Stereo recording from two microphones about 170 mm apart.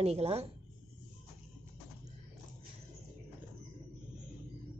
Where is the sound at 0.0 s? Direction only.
35° right (ahead or behind).